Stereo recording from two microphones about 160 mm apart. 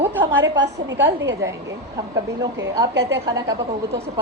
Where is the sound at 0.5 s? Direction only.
90° right.